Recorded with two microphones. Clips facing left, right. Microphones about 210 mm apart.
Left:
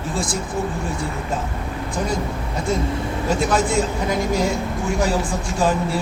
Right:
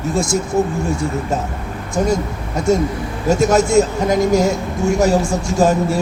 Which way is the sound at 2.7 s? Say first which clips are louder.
Right 6 dB; 45° right (ahead or behind).